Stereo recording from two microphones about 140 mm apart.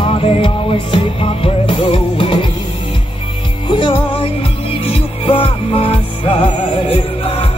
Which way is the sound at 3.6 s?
35° left (ahead or behind).